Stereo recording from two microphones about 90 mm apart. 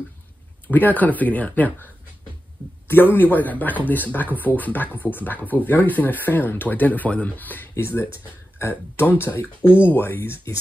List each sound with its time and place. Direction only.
0.7 s speech: 20° left (ahead or behind)
2.9 s speech: 25° left (ahead or behind)